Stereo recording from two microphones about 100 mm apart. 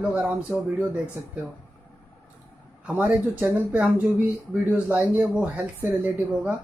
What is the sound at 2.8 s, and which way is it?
Speech, 15° right (ahead or behind).